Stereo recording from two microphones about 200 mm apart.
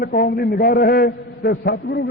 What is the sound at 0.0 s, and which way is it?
A man's voice, 45° left (ahead or behind).